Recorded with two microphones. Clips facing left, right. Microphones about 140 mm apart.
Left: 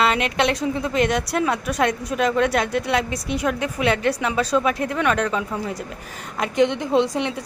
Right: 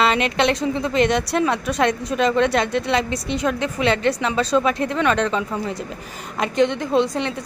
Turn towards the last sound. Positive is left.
turn(degrees=15)  # may be behind; listen again after turning